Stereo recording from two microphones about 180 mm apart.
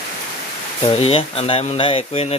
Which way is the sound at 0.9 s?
30° left (ahead or behind).